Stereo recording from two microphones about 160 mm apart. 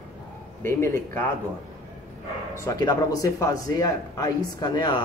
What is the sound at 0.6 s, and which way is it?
Speech, 15° left (ahead or behind).